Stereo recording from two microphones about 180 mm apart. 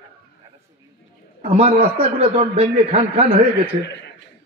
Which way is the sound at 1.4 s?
35° right (ahead or behind).